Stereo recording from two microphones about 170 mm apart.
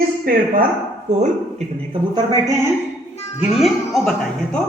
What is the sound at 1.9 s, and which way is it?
Speech, 25° right (ahead or behind).